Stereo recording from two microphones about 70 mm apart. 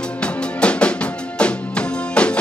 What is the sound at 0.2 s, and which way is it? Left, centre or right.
Music, centre.